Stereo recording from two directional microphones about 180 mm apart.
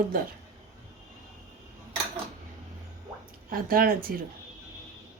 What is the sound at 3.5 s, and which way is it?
Speech, 55° right (ahead or behind).